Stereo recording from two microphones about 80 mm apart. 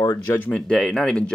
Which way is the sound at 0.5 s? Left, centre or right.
Centre.